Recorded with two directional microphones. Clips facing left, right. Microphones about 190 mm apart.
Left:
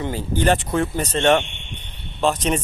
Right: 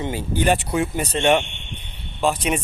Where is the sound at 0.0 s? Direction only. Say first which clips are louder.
Left 1 dB; 15° right (ahead or behind).